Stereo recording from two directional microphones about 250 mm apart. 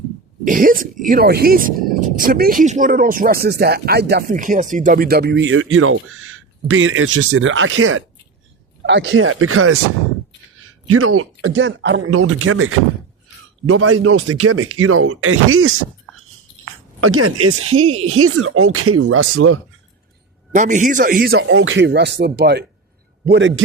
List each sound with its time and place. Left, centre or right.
0.4 s speech: right
10.8 s speech: right
20.5 s speech: right
21.3 s speech: right